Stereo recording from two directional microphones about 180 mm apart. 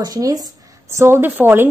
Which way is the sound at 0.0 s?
20° right (ahead or behind).